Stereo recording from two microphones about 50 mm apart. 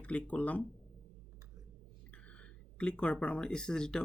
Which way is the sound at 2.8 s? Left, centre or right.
Left.